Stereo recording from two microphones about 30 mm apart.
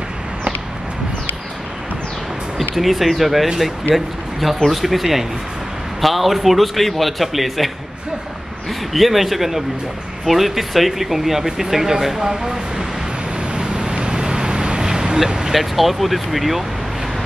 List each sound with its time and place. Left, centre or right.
2.7 s a man's voice: centre
8.9 s a man's voice: centre
13.6 s vehicle: right
15.2 s speech: right
15.5 s a man's voice: centre